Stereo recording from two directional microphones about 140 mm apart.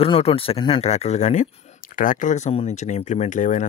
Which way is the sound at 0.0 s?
40° left (ahead or behind).